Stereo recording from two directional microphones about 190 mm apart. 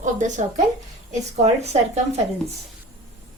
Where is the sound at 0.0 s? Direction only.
40° right (ahead or behind).